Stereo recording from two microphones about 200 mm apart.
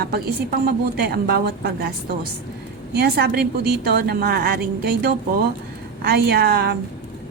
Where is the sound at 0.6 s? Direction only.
50° right (ahead or behind).